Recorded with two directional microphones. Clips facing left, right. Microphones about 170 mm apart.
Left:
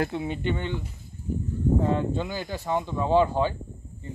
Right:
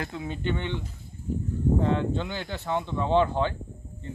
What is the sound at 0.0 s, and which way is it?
Speech, 30° left (ahead or behind).